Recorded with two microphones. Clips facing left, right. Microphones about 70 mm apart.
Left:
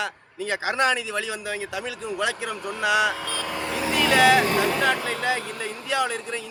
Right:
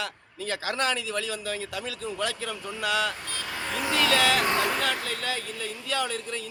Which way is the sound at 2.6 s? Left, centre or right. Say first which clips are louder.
Left 5 dB; left.